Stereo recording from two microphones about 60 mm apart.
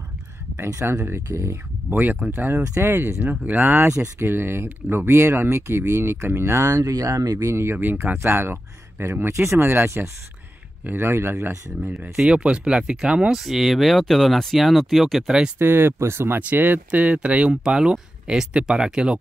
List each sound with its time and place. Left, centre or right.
1.0 s speech: right
1.9 s speech: right
4.2 s speech: right
6.8 s speech: right
7.5 s speech: right
8.2 s speech: right
9.3 s speech: right
12.3 s speech: centre
13.4 s speech: centre
15.6 s speech: right
16.3 s speech: right; by 19.1 s centre